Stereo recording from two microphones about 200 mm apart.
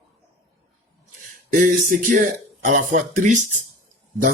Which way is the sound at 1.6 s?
40° right (ahead or behind).